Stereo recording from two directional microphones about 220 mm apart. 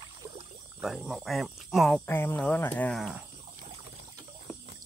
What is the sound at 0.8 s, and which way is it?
Speech, centre (ahead or behind).